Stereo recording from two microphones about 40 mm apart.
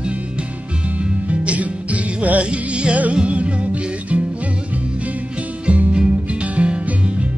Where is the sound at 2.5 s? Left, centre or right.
Right.